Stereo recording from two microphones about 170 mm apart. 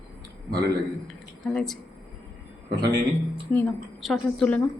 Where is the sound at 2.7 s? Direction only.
25° right (ahead or behind).